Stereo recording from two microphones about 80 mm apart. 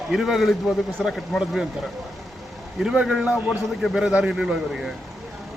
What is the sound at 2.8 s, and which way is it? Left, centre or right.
A man's voice, centre.